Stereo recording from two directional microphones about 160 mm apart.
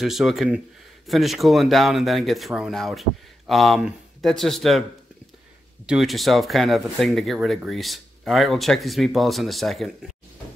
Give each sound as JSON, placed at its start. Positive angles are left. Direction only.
{"t": 0.0, "sound": "speech", "side_deg": 0}
{"t": 5.9, "sound": "speech", "side_deg": 0}